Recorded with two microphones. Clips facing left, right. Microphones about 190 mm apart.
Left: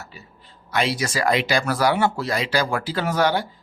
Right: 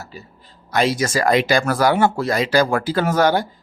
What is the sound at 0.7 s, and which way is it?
Speech, 45° right (ahead or behind).